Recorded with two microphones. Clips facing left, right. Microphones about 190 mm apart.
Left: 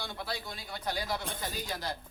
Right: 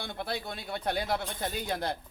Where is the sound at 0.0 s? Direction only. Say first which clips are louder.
Right 3 dB; 55° right (ahead or behind).